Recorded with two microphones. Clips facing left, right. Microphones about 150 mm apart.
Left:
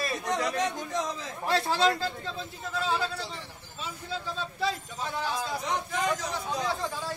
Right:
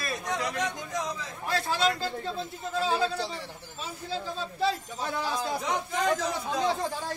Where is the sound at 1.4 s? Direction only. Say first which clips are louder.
Left 2 dB; 30° left (ahead or behind).